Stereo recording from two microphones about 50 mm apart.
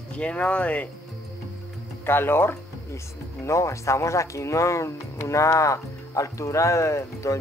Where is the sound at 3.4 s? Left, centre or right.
Left.